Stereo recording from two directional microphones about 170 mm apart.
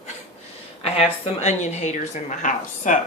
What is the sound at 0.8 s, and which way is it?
Speech, 35° left (ahead or behind).